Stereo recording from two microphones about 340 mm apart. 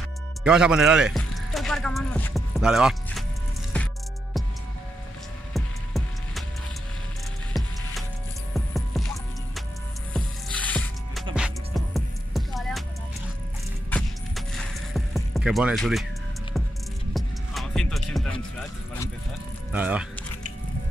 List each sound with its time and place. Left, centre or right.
0.4 s speech: centre
3.7 s music: centre
5.5 s music: centre
7.5 s music: centre
10.1 s music: centre
13.8 s music: centre
17.1 s music: centre
19.7 s speech: centre